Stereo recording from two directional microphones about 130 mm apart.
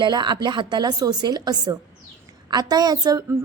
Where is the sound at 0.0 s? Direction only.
35° right (ahead or behind).